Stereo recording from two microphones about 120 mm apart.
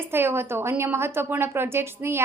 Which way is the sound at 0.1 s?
20° right (ahead or behind).